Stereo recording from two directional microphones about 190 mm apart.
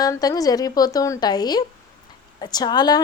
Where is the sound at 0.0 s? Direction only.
20° left (ahead or behind).